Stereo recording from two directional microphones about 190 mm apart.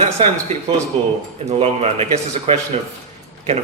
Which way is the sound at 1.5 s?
35° right (ahead or behind).